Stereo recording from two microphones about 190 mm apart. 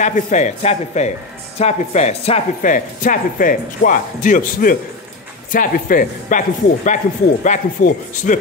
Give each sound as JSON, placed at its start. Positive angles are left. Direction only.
{"t": 0.0, "sound": "speech", "side_deg": 40}